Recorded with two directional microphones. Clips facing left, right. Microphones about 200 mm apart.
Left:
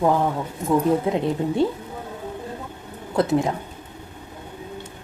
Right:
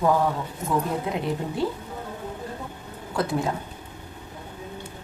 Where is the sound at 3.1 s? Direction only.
20° left (ahead or behind).